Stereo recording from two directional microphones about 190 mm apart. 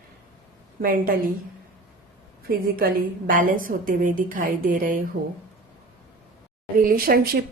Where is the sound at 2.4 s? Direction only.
50° right (ahead or behind).